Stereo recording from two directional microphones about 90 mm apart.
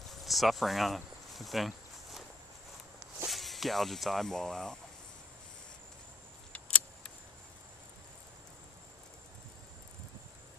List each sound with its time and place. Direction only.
0.1 s a sound: centre (ahead or behind)
3.3 s speech: centre (ahead or behind)
6.5 s vehicle: 15° left (ahead or behind)